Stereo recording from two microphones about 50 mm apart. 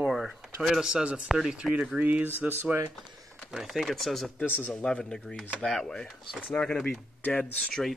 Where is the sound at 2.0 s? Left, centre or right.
Right.